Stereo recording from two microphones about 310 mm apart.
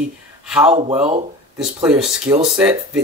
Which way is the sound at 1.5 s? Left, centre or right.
Centre.